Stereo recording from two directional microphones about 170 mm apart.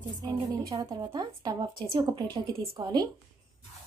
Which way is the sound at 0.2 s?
20° right (ahead or behind).